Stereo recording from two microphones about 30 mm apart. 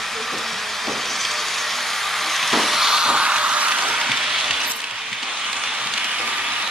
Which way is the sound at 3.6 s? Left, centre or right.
Right.